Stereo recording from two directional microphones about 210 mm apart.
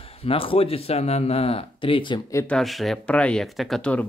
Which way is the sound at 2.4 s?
Centre (ahead or behind).